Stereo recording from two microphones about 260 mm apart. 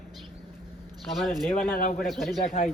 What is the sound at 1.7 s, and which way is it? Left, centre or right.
Speech, left.